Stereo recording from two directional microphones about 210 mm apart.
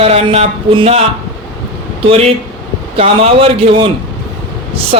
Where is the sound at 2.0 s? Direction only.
25° right (ahead or behind).